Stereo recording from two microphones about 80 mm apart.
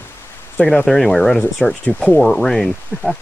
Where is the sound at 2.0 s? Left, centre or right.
Left.